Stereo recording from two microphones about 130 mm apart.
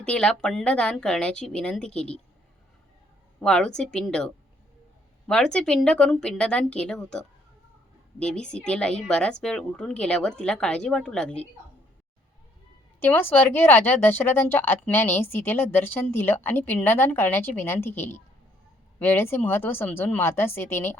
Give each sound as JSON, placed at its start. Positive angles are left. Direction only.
{"t": 0.0, "sound": "speech", "side_deg": 10}
{"t": 3.4, "sound": "a woman's voice", "side_deg": 5}
{"t": 5.3, "sound": "speech", "side_deg": 5}
{"t": 13.0, "sound": "speech", "side_deg": 15}